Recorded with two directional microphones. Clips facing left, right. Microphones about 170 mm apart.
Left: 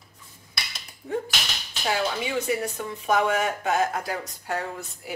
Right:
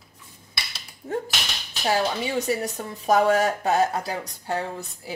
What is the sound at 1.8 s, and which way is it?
Speech, 35° right (ahead or behind).